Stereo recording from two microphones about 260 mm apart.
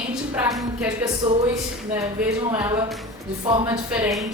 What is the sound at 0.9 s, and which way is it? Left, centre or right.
A woman's voice, centre.